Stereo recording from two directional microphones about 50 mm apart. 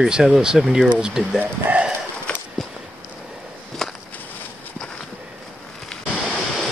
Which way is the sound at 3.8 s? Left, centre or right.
Centre.